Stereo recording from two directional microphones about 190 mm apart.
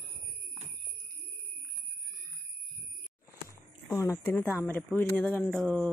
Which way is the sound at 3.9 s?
15° left (ahead or behind).